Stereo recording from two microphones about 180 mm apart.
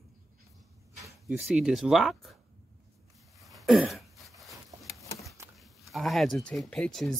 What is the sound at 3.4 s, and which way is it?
Throat clearing, centre (ahead or behind).